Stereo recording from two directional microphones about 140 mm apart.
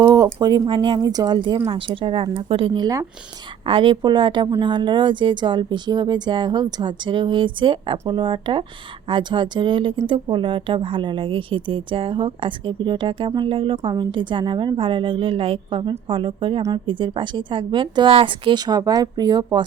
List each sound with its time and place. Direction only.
0.0 s a woman's voice: 25° right (ahead or behind)
3.7 s a woman's voice: 35° right (ahead or behind)